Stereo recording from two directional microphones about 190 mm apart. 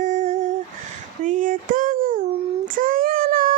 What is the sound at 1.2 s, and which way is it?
Speech, 45° right (ahead or behind).